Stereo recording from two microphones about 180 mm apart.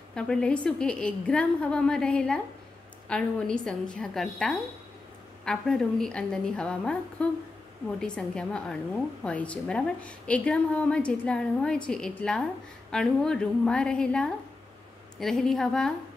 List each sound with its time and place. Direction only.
0.1 s speech: 5° left (ahead or behind)